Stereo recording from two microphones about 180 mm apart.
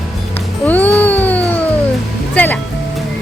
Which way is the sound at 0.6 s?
10° left (ahead or behind).